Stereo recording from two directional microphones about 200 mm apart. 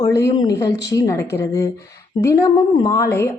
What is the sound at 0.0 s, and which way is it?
A woman's voice, 20° left (ahead or behind).